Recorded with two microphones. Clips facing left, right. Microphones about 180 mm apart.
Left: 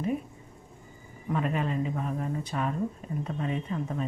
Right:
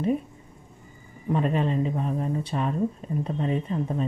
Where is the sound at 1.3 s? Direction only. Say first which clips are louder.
Right 5 dB; 30° right (ahead or behind).